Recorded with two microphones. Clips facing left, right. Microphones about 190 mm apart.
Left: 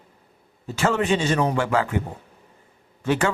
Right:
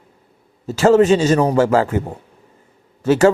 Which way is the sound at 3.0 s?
40° right (ahead or behind).